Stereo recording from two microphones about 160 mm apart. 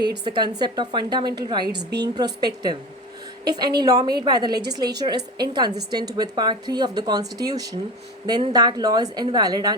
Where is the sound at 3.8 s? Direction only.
25° right (ahead or behind).